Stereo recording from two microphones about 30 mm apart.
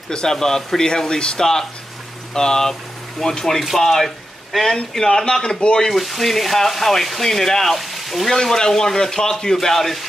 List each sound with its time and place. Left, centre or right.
0.1 s speech: left
1.4 s speech: centre
3.2 s speech: centre
5.0 s speech: left
5.9 s speech: centre
7.7 s speech: centre
8.3 s speech: centre